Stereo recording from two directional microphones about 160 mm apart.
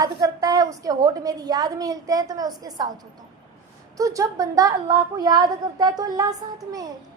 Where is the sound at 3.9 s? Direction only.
20° right (ahead or behind).